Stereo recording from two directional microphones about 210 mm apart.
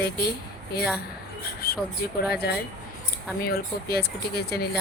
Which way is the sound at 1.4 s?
45° left (ahead or behind).